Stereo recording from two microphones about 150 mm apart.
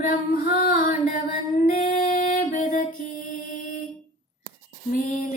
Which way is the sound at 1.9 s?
65° left (ahead or behind).